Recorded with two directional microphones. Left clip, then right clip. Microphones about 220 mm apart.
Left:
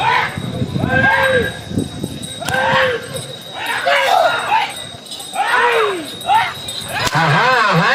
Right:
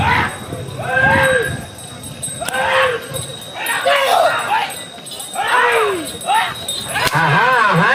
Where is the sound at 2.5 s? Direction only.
50° left (ahead or behind).